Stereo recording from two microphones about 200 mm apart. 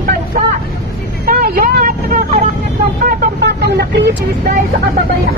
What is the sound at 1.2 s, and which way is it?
Vehicle, 45° right (ahead or behind).